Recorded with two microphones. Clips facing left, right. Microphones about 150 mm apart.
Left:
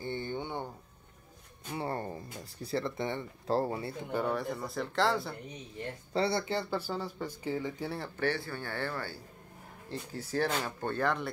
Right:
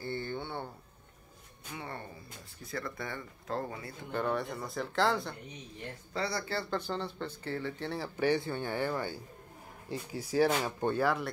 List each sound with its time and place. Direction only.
0.0 s a sound: 15° left (ahead or behind)
1.7 s a sound: 35° left (ahead or behind)
2.6 s speech: 25° left (ahead or behind)
4.1 s speech: 5° left (ahead or behind)
6.1 s speech: 30° left (ahead or behind)
8.2 s speech: 20° right (ahead or behind)